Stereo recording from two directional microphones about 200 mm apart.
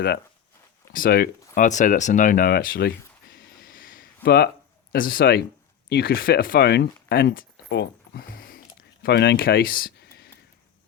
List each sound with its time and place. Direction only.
0.9 s speech: 45° left (ahead or behind)
3.3 s a sound: 45° left (ahead or behind)
4.9 s speech: 45° left (ahead or behind)